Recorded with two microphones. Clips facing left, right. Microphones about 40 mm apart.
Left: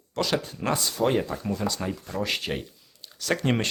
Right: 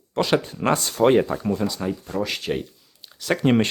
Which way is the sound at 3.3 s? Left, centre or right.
Centre.